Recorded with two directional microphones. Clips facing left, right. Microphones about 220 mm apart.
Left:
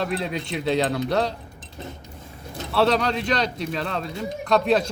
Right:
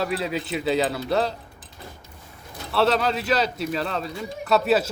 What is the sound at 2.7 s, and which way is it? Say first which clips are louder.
Speech: left 1 dB; centre (ahead or behind).